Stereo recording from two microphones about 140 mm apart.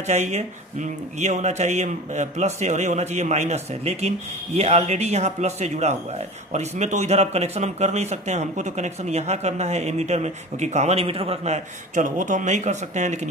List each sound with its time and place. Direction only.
0.0 s speech: 55° right (ahead or behind)